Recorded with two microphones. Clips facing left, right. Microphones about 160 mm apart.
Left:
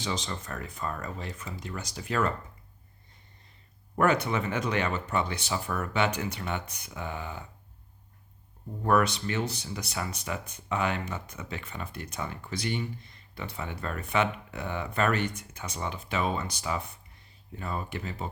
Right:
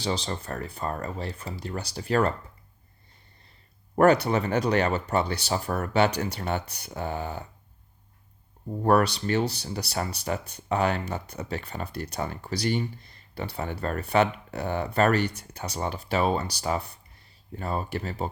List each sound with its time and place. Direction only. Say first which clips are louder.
0.0 s speech: right 4 dB; 35° right (ahead or behind)
3.9 s speech: right 6 dB; 35° right (ahead or behind)
8.8 s speech: right 3 dB; 35° right (ahead or behind)